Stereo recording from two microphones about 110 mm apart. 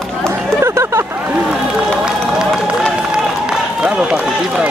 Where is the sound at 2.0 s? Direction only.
5° right (ahead or behind).